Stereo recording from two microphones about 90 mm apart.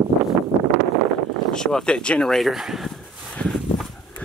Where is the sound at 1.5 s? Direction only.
10° left (ahead or behind).